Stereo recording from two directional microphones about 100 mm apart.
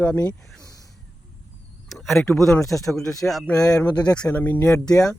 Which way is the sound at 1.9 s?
Centre (ahead or behind).